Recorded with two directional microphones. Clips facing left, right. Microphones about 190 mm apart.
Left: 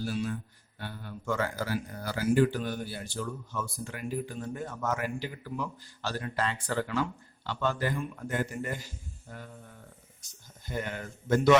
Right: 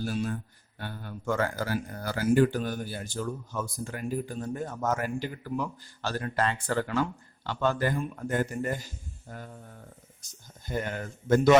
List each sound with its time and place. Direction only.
0.0 s speech: 45° right (ahead or behind)
10.7 s speech: 45° right (ahead or behind)